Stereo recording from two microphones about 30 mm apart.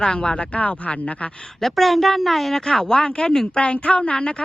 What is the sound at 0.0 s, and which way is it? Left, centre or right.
Speech, left.